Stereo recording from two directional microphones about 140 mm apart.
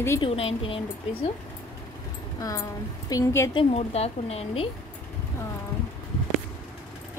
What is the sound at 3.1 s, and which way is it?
Speech, 20° left (ahead or behind).